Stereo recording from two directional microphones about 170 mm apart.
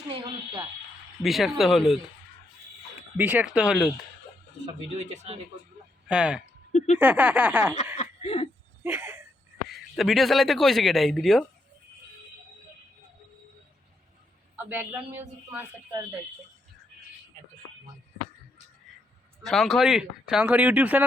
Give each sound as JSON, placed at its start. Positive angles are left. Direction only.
{"t": 0.1, "sound": "a woman's voice", "side_deg": -30}
{"t": 1.2, "sound": "speech", "side_deg": 0}
{"t": 3.2, "sound": "speech", "side_deg": -10}
{"t": 4.6, "sound": "speech", "side_deg": -40}
{"t": 6.1, "sound": "speech", "side_deg": -5}
{"t": 6.4, "sound": "a sound", "side_deg": 40}
{"t": 7.0, "sound": "speech", "side_deg": -10}
{"t": 7.9, "sound": "cough", "side_deg": 35}
{"t": 8.8, "sound": "a sound", "side_deg": -10}
{"t": 9.7, "sound": "speech", "side_deg": 0}
{"t": 14.5, "sound": "speech", "side_deg": -10}
{"t": 19.4, "sound": "speech", "side_deg": 0}